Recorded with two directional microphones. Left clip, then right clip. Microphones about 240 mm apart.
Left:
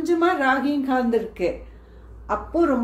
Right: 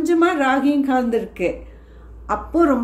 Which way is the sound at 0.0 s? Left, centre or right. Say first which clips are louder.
Right 3 dB; centre.